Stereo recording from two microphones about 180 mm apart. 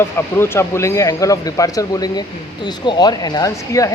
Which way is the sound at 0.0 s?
15° left (ahead or behind).